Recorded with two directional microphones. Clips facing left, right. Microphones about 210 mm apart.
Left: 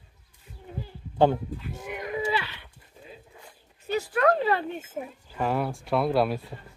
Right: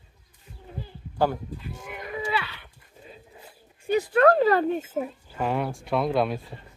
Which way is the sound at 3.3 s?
15° right (ahead or behind).